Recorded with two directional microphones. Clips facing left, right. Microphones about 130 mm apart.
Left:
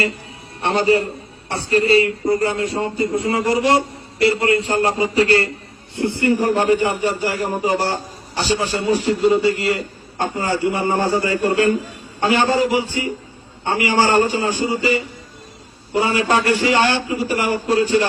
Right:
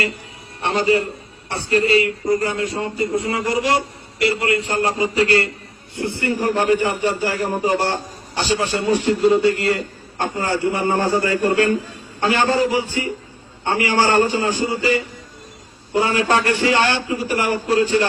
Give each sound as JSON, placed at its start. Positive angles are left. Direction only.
{"t": 0.6, "sound": "a man's voice", "side_deg": 30}
{"t": 6.0, "sound": "a man's voice", "side_deg": 20}
{"t": 7.9, "sound": "a sound", "side_deg": 40}
{"t": 8.9, "sound": "a man's voice", "side_deg": 35}
{"t": 9.1, "sound": "a man's voice", "side_deg": 10}
{"t": 9.6, "sound": "a man's voice", "side_deg": -40}
{"t": 10.2, "sound": "a man's voice", "side_deg": 15}
{"t": 16.0, "sound": "a man's voice", "side_deg": 10}